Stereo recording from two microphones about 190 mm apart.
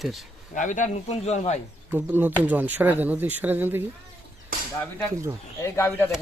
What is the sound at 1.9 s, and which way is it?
Speech, 10° right (ahead or behind).